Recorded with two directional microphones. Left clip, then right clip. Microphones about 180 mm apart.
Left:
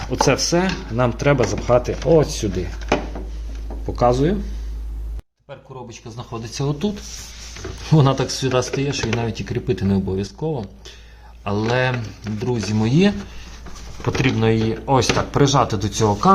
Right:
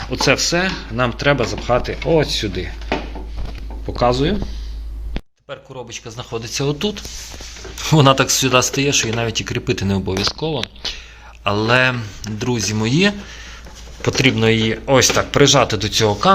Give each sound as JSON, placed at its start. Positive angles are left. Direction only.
{"t": 0.1, "sound": "speech", "side_deg": 10}
{"t": 3.9, "sound": "speech", "side_deg": 5}
{"t": 5.5, "sound": "speech", "side_deg": -5}
{"t": 7.9, "sound": "speech", "side_deg": -10}
{"t": 11.7, "sound": "speech", "side_deg": -10}
{"t": 14.0, "sound": "speech", "side_deg": -5}
{"t": 16.0, "sound": "speech", "side_deg": -15}